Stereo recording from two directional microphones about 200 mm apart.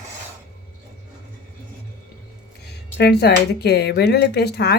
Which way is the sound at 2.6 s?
55° left (ahead or behind).